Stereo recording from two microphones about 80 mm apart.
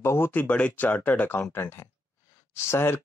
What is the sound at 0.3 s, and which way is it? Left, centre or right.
Speech, centre.